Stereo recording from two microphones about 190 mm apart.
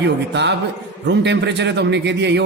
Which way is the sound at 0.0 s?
65° right (ahead or behind).